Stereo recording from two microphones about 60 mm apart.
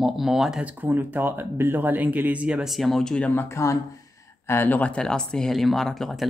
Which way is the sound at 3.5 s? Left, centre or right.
Left.